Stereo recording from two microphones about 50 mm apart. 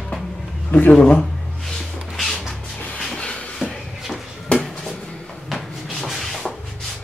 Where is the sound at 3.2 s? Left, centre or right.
Left.